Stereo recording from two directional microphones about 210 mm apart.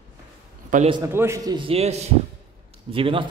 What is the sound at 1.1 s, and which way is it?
A man's voice, 10° right (ahead or behind).